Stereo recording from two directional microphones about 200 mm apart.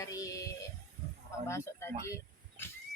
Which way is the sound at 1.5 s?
15° left (ahead or behind).